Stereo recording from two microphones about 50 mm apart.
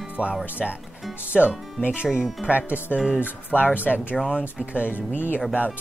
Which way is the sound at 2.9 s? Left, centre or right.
Centre.